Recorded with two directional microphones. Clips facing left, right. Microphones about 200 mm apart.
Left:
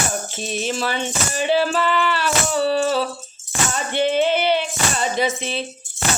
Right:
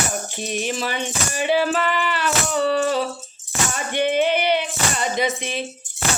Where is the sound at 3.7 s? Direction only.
15° right (ahead or behind).